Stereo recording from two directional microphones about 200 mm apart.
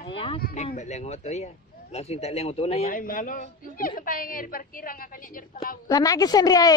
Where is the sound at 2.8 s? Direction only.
45° left (ahead or behind).